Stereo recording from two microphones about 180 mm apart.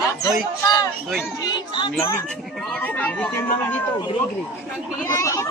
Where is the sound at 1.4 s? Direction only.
25° left (ahead or behind).